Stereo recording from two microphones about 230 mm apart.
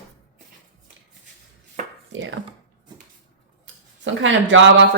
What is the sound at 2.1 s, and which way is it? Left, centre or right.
Speech, right.